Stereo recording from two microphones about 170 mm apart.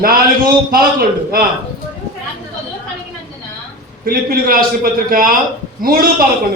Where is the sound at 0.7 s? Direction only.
60° right (ahead or behind).